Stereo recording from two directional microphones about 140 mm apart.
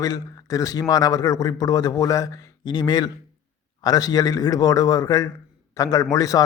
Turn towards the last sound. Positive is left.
turn(degrees=25)  # may be behind; listen again after turning